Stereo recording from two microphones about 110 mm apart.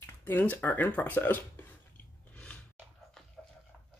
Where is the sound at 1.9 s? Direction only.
10° left (ahead or behind).